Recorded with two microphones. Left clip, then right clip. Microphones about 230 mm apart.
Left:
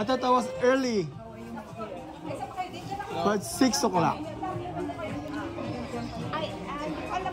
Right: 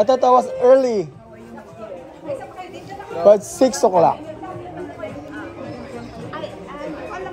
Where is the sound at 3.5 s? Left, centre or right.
Left.